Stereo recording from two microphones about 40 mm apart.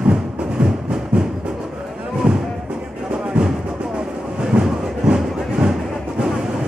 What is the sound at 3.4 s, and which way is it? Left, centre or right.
Music, right.